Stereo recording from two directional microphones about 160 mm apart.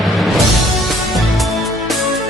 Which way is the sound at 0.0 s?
Centre (ahead or behind).